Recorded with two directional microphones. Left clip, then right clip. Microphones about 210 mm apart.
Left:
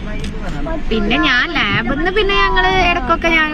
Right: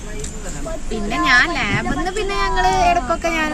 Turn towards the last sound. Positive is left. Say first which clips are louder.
# left 5 dB
turn(degrees=-10)  # may be behind; listen again after turning